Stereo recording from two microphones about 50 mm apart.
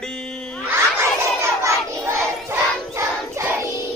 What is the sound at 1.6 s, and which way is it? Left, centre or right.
Child singing, right.